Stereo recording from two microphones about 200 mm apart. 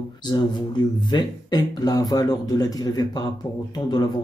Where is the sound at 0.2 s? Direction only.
20° left (ahead or behind).